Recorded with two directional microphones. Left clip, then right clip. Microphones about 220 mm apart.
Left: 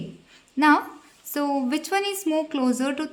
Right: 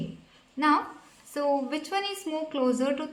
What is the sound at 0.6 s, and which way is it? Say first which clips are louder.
A woman's voice: left 5 dB; 50° left (ahead or behind).